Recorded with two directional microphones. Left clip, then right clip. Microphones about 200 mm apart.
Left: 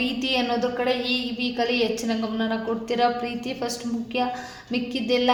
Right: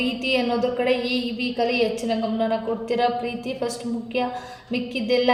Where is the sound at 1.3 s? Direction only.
30° left (ahead or behind).